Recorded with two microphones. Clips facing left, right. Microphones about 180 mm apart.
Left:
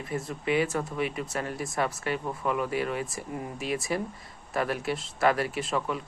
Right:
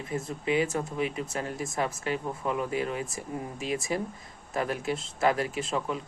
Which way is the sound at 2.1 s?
30° right (ahead or behind).